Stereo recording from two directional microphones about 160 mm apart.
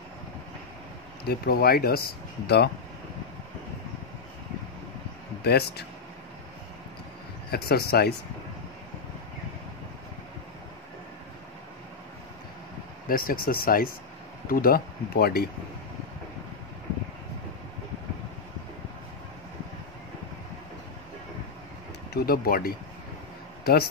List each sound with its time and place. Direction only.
1.2 s speech: 80° left
2.4 s speech: 90° left
5.4 s speech: 90° left
7.5 s speech: 80° left
13.1 s speech: 65° left (ahead or behind)
22.1 s a man's voice: 70° left (ahead or behind)